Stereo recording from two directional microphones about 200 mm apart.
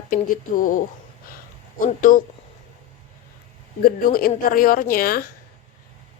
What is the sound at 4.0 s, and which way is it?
A woman's voice, 45° left (ahead or behind).